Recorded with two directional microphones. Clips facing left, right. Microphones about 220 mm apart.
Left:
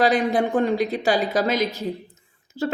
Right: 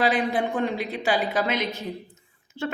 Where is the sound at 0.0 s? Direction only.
40° left (ahead or behind).